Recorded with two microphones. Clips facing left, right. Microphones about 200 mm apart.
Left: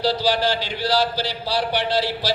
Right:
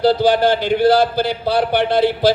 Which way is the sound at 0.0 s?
55° right (ahead or behind).